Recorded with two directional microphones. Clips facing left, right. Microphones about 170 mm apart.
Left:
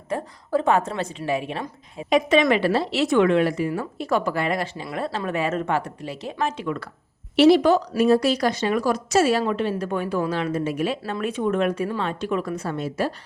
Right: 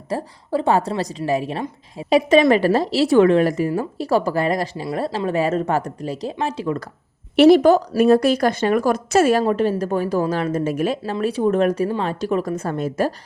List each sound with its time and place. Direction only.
0.1 s speech: 35° right (ahead or behind)
7.3 s speech: 50° right (ahead or behind)
11.0 s speech: 35° right (ahead or behind)